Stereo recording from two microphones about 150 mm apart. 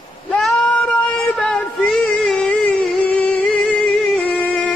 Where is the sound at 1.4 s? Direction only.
Centre (ahead or behind).